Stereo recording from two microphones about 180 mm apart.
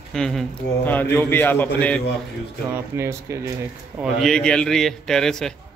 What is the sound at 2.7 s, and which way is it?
Speech, 15° right (ahead or behind).